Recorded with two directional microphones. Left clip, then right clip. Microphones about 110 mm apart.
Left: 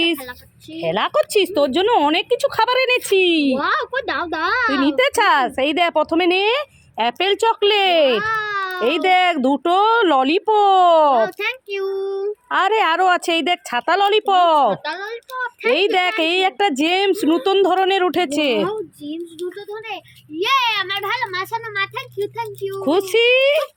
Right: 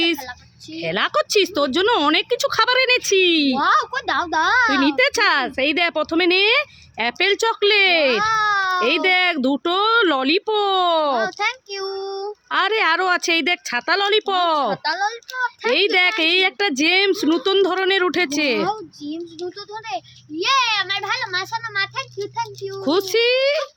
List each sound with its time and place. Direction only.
0.8 s a woman's voice: 5° right (ahead or behind)
3.6 s a woman's voice: 35° right (ahead or behind)
4.7 s speech: centre (ahead or behind)
8.2 s baby cry: 30° right (ahead or behind)
8.8 s speech: centre (ahead or behind)
11.2 s a child's voice: 30° right (ahead or behind)
12.5 s speech: centre (ahead or behind)
14.7 s a child's voice: 25° right (ahead or behind)
15.7 s a woman's voice: centre (ahead or behind)
18.7 s a child's voice: 20° right (ahead or behind)
23.0 s speech: 5° left (ahead or behind)